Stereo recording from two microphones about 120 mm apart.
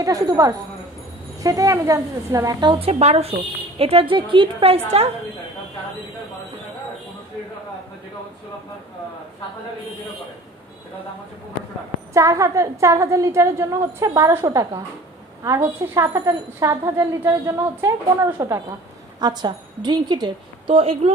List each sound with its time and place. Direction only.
0.0 s a woman's voice: 30° right (ahead or behind)
2.8 s a woman's voice: 60° right (ahead or behind)
12.1 s a woman's voice: 25° right (ahead or behind); by 21.1 s 50° right (ahead or behind)